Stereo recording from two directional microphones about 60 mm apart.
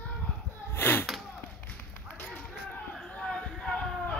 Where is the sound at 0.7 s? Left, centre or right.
Left.